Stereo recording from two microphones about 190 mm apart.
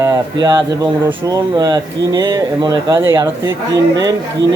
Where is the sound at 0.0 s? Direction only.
20° right (ahead or behind).